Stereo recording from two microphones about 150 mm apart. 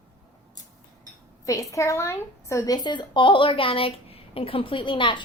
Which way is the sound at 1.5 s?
20° left (ahead or behind).